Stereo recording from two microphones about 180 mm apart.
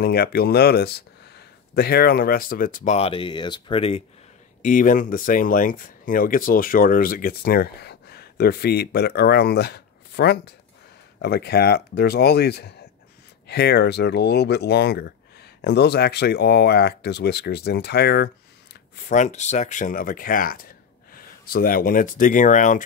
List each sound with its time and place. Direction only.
0.0 s speech: 60° left (ahead or behind); by 4.0 s 30° left (ahead or behind)
4.6 s speech: 45° left (ahead or behind); by 18.3 s 65° left (ahead or behind)
18.9 s speech: 45° left (ahead or behind)